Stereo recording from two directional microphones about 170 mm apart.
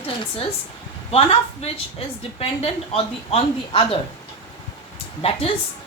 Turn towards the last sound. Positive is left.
turn(degrees=35)  # may be behind; listen again after turning